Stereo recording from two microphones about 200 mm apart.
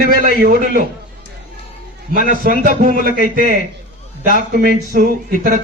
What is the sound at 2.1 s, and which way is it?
A man's voice, 45° right (ahead or behind).